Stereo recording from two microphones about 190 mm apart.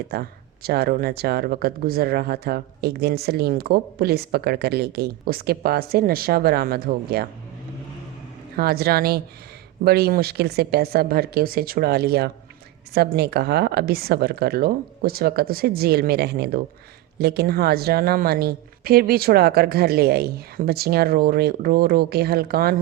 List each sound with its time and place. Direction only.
0.1 s speech: 55° right (ahead or behind)
8.5 s speech: 55° right (ahead or behind)